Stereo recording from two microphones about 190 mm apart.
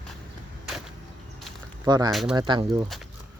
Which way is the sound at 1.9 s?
20° right (ahead or behind).